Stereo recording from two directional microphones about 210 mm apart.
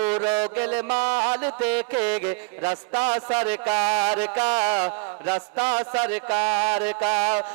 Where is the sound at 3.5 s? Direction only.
15° right (ahead or behind).